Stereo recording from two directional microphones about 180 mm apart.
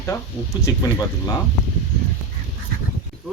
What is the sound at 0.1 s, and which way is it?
Speech, 15° left (ahead or behind).